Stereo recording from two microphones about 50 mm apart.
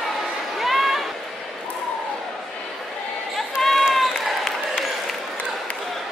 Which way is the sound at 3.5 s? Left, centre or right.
Centre.